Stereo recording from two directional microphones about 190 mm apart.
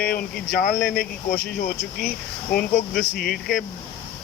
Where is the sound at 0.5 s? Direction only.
50° left (ahead or behind).